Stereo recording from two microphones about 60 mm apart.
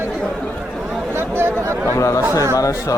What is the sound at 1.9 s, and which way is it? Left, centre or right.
Chatter, left.